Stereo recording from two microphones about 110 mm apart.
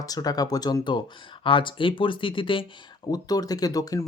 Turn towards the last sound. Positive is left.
turn(degrees=35)  # may be behind; listen again after turning